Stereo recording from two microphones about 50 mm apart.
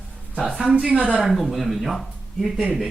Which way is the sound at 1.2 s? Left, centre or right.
Centre.